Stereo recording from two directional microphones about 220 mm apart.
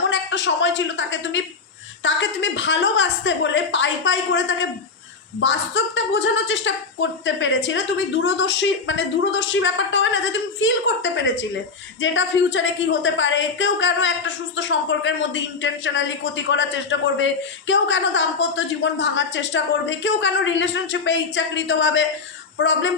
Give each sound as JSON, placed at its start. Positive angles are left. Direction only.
{"t": 0.1, "sound": "a woman's voice", "side_deg": 55}